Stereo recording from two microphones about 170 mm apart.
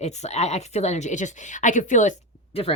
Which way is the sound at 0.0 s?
40° left (ahead or behind).